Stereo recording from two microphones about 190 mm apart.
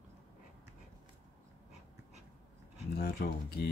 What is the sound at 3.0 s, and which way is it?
Speech, 55° left (ahead or behind).